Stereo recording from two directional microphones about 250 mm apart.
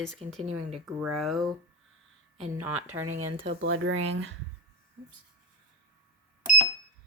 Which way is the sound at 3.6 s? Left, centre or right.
Right.